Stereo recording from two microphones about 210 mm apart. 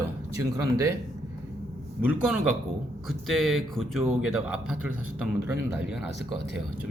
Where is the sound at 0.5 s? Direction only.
15° right (ahead or behind).